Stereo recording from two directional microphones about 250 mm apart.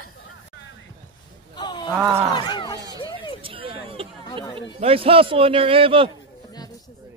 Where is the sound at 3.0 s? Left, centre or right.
Centre.